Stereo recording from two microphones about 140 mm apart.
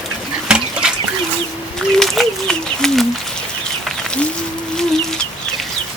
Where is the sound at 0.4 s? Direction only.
5° right (ahead or behind).